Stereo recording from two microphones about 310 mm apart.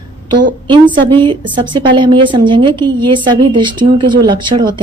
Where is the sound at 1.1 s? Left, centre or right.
Centre.